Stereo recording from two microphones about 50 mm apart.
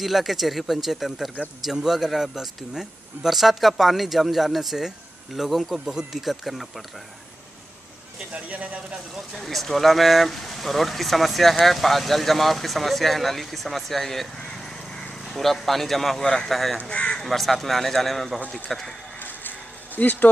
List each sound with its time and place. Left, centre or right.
0.0 s speech: centre
8.3 s speech: right
9.3 s speech: centre
14.4 s a sound: centre
17.1 s speech: centre
19.1 s a sound: left
20.0 s speech: left